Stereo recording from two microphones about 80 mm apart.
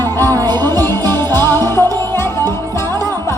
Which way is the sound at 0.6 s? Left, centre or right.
Left.